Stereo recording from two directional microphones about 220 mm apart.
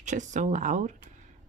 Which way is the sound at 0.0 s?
35° right (ahead or behind).